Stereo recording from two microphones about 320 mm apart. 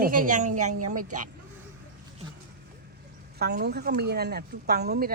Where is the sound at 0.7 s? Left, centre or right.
Right.